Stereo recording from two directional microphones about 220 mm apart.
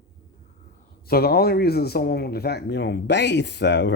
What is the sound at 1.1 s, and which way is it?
Speech, 45° left (ahead or behind).